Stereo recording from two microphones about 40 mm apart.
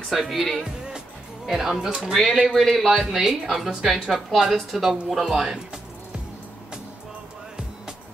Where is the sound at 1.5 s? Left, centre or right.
Centre.